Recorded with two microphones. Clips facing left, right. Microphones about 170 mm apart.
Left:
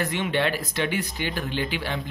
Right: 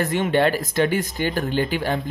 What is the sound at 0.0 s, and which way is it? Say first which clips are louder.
Speech: right 6 dB; 45° right (ahead or behind).